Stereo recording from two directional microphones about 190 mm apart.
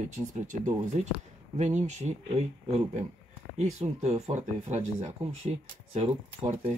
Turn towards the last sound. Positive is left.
turn(degrees=-35)  # may be behind; listen again after turning